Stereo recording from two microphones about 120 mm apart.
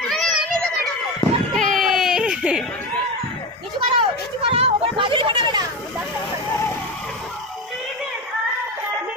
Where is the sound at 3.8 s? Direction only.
45° right (ahead or behind).